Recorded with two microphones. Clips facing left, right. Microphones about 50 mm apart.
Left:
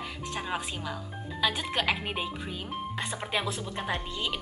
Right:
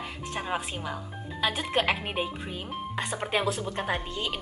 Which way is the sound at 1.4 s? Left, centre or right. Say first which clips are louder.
Right 2 dB; right.